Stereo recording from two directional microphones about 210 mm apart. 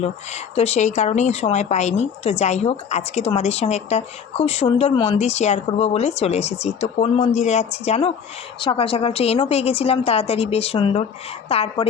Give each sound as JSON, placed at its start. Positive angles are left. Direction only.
{"t": 0.5, "sound": "a woman's voice", "side_deg": 30}